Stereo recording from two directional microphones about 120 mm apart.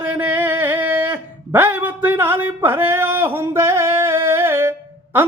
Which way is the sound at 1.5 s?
15° right (ahead or behind).